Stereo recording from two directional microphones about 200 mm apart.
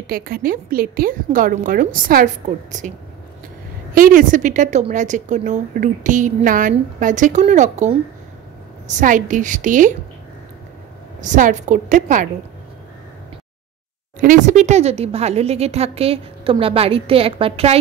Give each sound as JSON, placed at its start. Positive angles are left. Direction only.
{"t": 0.0, "sound": "a woman's voice", "side_deg": -50}
{"t": 3.9, "sound": "speech", "side_deg": -45}
{"t": 11.1, "sound": "speech", "side_deg": -40}
{"t": 14.2, "sound": "speech", "side_deg": -40}